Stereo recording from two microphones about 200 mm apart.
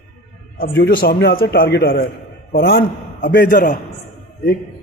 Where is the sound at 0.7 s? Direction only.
55° left (ahead or behind).